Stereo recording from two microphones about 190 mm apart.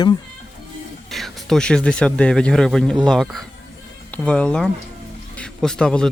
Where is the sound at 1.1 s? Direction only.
Centre (ahead or behind).